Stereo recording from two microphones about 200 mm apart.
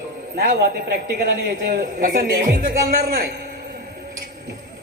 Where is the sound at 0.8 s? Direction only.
50° right (ahead or behind).